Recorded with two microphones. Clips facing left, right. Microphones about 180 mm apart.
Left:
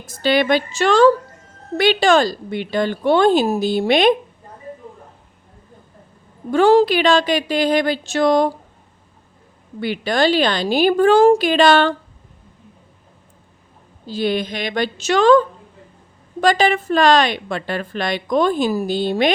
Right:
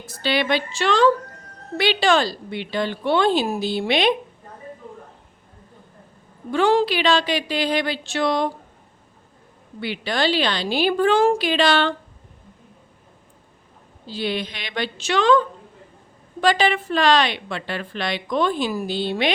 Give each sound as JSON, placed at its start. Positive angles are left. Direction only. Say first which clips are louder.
{"t": 0.0, "sound": "a woman's voice", "louder": "left 6 dB", "side_deg": 45}
{"t": 6.5, "sound": "a woman's voice", "louder": "left 6 dB", "side_deg": 40}
{"t": 9.8, "sound": "a woman's voice", "louder": "left 5 dB", "side_deg": 45}
{"t": 14.1, "sound": "a woman's voice", "louder": "left 6 dB", "side_deg": 45}
{"t": 16.4, "sound": "a woman's voice", "louder": "left 3 dB", "side_deg": 45}